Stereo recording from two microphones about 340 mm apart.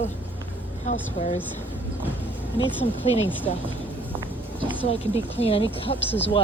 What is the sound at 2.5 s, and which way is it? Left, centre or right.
A woman's voice, centre.